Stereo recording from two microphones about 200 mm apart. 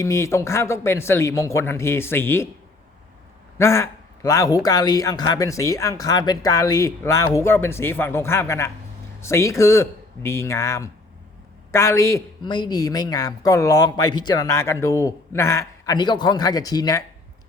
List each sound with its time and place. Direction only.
0.0 s speech: 15° left (ahead or behind)
3.6 s speech: 15° left (ahead or behind)